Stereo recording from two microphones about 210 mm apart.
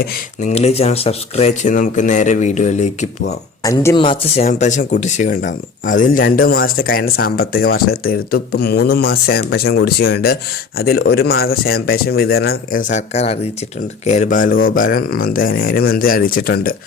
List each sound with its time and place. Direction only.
0.0 s speech: 35° left (ahead or behind)
3.6 s speech: 15° left (ahead or behind)
4.4 s speech: 35° left (ahead or behind)